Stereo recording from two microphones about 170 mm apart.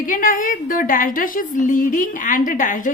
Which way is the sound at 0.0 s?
50° left (ahead or behind).